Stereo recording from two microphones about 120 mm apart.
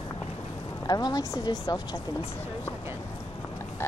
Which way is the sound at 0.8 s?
35° left (ahead or behind).